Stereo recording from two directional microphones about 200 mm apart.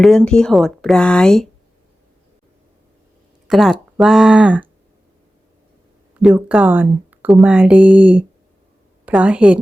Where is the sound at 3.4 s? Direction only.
Centre (ahead or behind).